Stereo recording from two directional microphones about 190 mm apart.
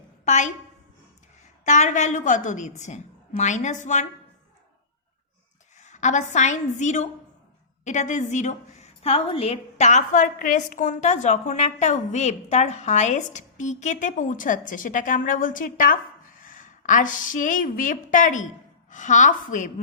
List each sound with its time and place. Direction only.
0.3 s a woman's voice: 40° left (ahead or behind)
1.6 s a woman's voice: 40° left (ahead or behind)
5.7 s a woman's voice: 40° left (ahead or behind)